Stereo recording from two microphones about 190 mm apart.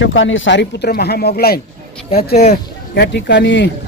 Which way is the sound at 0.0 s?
85° left.